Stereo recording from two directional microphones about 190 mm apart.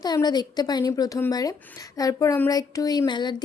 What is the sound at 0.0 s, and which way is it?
Speech, 20° left (ahead or behind).